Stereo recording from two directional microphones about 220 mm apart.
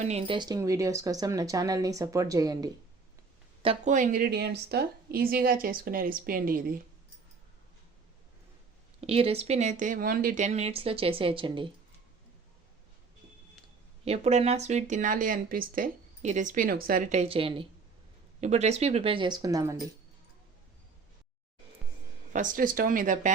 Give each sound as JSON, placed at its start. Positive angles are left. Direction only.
{"t": 0.0, "sound": "speech", "side_deg": -30}
{"t": 3.6, "sound": "speech", "side_deg": -30}
{"t": 9.0, "sound": "speech", "side_deg": -25}
{"t": 14.0, "sound": "speech", "side_deg": -30}
{"t": 22.3, "sound": "speech", "side_deg": -35}